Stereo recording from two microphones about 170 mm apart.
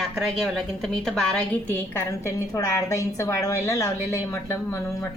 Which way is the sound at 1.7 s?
15° left (ahead or behind).